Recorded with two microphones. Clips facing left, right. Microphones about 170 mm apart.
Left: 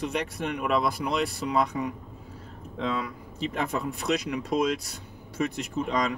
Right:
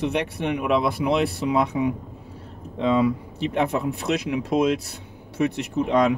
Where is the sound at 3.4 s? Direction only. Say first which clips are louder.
Right 6 dB; 65° right (ahead or behind).